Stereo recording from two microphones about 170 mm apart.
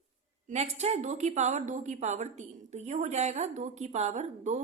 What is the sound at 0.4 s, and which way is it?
A woman's voice, 45° right (ahead or behind).